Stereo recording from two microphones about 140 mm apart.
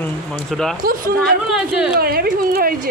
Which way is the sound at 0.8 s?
90° right.